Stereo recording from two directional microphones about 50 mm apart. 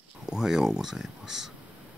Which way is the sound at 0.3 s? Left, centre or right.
Centre.